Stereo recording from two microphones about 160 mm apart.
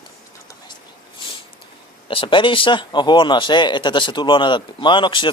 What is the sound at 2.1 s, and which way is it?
Speech, 30° left (ahead or behind).